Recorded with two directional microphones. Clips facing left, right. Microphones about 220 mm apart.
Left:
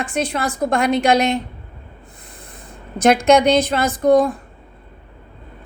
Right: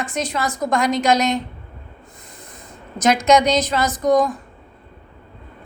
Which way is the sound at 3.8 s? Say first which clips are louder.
Left 2 dB; 30° left (ahead or behind).